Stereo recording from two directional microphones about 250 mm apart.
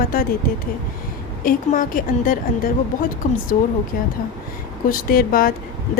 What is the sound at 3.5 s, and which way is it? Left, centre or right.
Speech, left.